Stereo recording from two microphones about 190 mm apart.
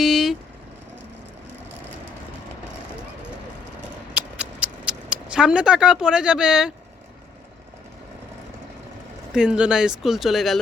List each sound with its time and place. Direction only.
0.0 s vehicle: centre (ahead or behind)
4.1 s a sound: 5° right (ahead or behind)
9.3 s speech: 5° right (ahead or behind)